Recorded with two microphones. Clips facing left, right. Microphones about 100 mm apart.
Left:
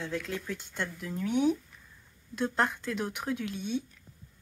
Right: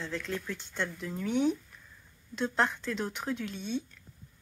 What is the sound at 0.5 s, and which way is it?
Speech, 5° left (ahead or behind).